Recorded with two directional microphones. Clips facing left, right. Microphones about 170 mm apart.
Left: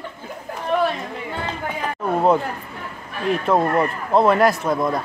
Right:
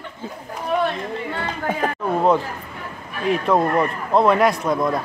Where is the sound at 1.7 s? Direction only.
45° right (ahead or behind).